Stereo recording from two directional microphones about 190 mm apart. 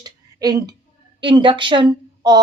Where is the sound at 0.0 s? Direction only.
20° right (ahead or behind).